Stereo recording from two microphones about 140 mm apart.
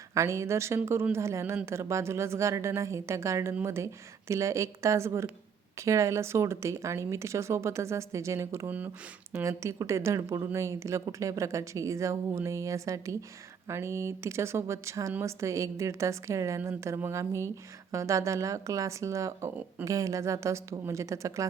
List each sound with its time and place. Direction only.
0.1 s a woman's voice: 20° right (ahead or behind)